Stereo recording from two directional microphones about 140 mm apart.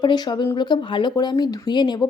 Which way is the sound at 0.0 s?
30° left (ahead or behind).